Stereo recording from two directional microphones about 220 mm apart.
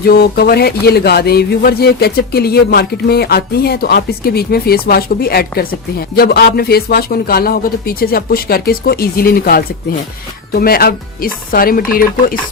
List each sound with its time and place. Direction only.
0.0 s speech: 45° left (ahead or behind)